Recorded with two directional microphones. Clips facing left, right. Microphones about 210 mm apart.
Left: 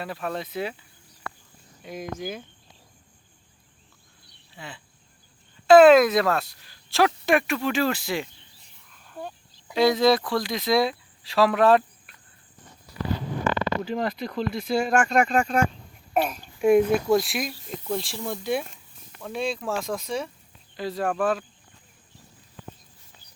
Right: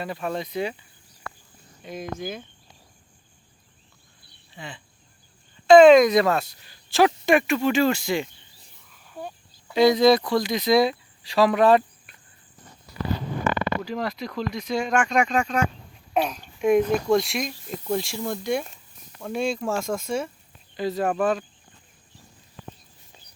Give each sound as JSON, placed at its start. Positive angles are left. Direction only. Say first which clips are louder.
{"t": 0.0, "sound": "speech", "louder": "right 2 dB", "side_deg": 0}
{"t": 4.5, "sound": "speech", "louder": "right 2 dB", "side_deg": 5}
{"t": 9.0, "sound": "a sound", "louder": "even", "side_deg": -10}
{"t": 9.7, "sound": "speech", "louder": "right 3 dB", "side_deg": 0}
{"t": 13.8, "sound": "speech", "louder": "left 1 dB", "side_deg": 0}
{"t": 23.1, "sound": "a sound", "louder": "right 4 dB", "side_deg": -20}